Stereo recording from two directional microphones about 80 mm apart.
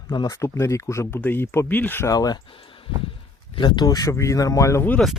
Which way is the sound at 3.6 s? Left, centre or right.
Left.